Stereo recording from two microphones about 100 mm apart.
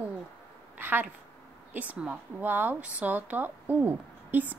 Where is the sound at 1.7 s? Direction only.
15° right (ahead or behind).